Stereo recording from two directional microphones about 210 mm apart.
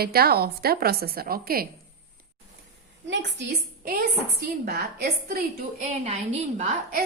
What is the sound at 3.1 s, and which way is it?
Speech, 55° right (ahead or behind).